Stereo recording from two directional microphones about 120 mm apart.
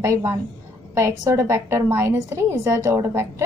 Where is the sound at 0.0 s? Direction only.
20° right (ahead or behind).